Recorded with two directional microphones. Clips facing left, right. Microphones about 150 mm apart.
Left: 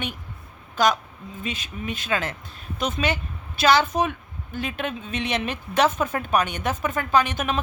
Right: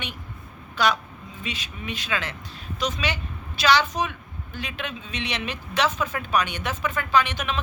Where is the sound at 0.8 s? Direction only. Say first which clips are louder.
Left 2 dB; 45° left (ahead or behind).